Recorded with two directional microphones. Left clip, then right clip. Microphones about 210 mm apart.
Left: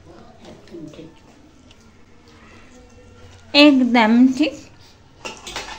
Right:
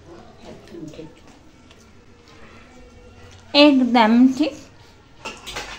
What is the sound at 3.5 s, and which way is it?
A woman's voice, 5° left (ahead or behind).